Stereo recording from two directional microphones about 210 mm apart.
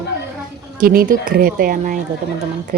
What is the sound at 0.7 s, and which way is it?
Speech, 40° right (ahead or behind).